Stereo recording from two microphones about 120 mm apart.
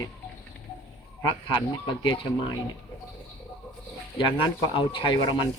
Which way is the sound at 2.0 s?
40° left (ahead or behind).